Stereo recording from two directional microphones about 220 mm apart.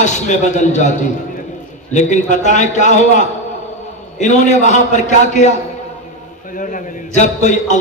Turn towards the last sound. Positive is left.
turn(degrees=35)  # may be behind; listen again after turning